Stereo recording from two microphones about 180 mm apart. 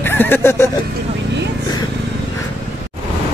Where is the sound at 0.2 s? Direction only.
10° left (ahead or behind).